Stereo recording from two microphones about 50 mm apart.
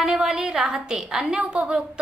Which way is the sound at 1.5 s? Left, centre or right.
Right.